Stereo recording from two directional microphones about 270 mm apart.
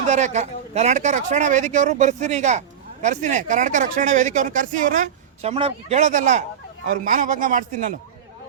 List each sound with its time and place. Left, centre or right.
0.1 s speech: right